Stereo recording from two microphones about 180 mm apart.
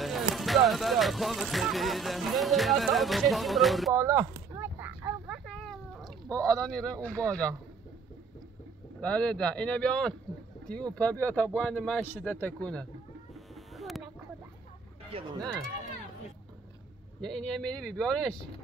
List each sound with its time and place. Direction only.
0.0 s speech: centre (ahead or behind)
3.9 s a sound: 20° right (ahead or behind); by 6.1 s centre (ahead or behind)
6.4 s speech: 5° left (ahead or behind)
9.0 s speech: 5° left (ahead or behind)
13.3 s bird: centre (ahead or behind)
15.1 s speech: 25° right (ahead or behind)
17.2 s speech: 5° left (ahead or behind)